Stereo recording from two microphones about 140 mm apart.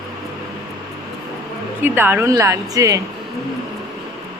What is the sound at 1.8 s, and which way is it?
Speech, 15° right (ahead or behind).